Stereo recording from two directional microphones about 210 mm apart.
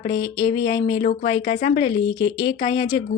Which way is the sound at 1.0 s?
40° left (ahead or behind).